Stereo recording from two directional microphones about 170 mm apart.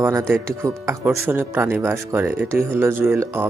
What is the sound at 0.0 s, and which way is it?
Speech, 15° right (ahead or behind).